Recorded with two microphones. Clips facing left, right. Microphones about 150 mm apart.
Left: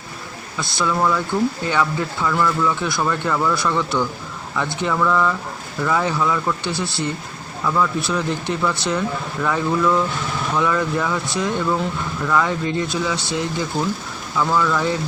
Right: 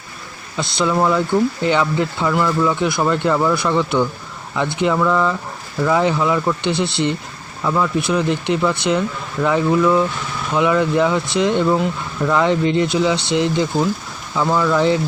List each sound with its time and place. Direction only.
0.6 s speech: 20° right (ahead or behind)